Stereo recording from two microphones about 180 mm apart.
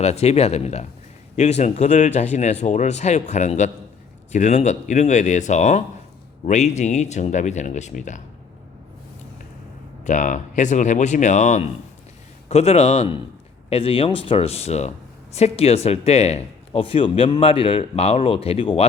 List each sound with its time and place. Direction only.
0.0 s speech: 35° left (ahead or behind)
10.0 s speech: 45° left (ahead or behind)